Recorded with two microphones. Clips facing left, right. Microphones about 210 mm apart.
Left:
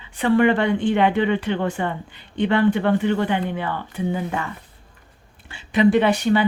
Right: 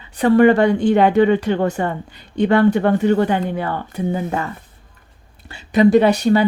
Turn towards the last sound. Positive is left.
turn(degrees=-40)  # may be behind; listen again after turning